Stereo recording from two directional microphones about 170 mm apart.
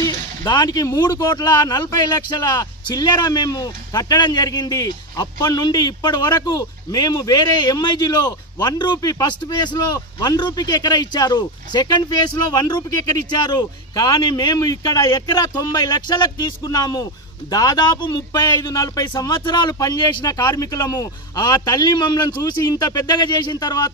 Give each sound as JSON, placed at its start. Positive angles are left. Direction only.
{"t": 0.0, "sound": "a man's voice", "side_deg": 25}